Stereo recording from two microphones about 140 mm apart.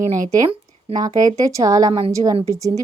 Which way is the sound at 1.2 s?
25° right (ahead or behind).